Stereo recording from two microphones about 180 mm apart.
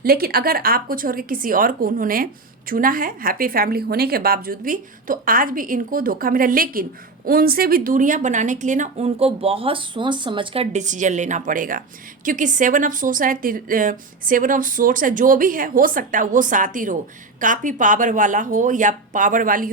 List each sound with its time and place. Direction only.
0.0 s a woman's voice: 55° right (ahead or behind)